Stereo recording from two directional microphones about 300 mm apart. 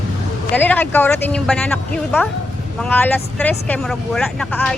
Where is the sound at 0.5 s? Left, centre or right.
Centre.